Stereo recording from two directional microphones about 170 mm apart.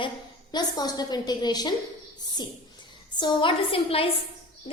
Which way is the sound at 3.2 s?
25° left (ahead or behind).